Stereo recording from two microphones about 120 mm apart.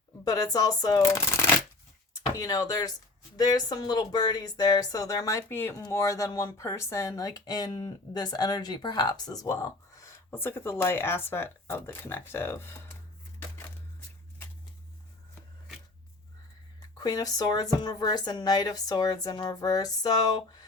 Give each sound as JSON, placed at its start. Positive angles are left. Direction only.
{"t": 0.3, "sound": "a woman's voice", "side_deg": 30}
{"t": 17.0, "sound": "a woman's voice", "side_deg": 30}